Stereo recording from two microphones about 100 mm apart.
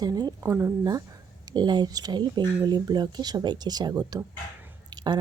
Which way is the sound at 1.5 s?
45° right (ahead or behind).